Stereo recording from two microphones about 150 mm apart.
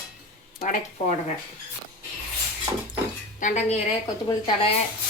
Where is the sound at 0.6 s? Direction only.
60° left (ahead or behind).